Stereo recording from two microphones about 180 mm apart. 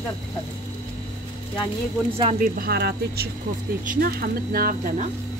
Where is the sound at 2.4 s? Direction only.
60° right (ahead or behind).